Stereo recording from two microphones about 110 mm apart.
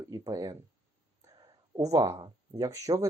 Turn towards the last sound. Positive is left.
turn(degrees=-30)  # may be behind; listen again after turning